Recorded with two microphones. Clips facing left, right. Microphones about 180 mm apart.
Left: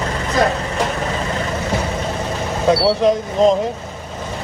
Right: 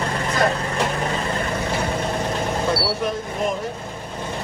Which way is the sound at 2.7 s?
80° left.